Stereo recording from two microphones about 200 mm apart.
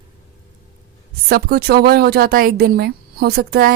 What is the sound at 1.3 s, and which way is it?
Speech, 50° right (ahead or behind).